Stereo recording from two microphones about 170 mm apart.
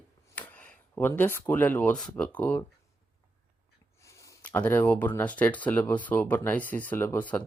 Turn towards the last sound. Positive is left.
turn(degrees=10)  # may be behind; listen again after turning